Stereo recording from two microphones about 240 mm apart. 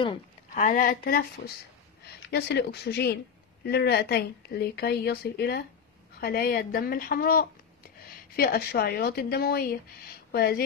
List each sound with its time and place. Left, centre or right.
0.6 s a woman's voice: left
2.2 s a woman's voice: left